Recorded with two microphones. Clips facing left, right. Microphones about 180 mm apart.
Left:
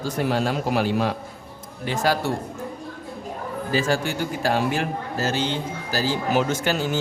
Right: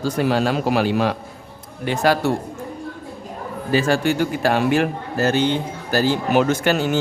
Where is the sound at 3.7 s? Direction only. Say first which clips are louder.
Right 5 dB; 65° right (ahead or behind).